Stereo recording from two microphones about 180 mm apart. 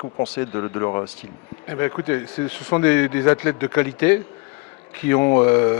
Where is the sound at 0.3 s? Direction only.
15° left (ahead or behind).